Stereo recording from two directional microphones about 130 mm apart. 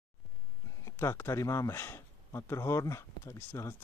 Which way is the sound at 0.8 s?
20° left (ahead or behind).